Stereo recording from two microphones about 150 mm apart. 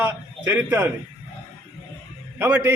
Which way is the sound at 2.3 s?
15° right (ahead or behind).